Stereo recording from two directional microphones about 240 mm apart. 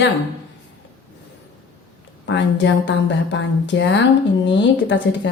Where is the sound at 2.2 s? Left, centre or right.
Left.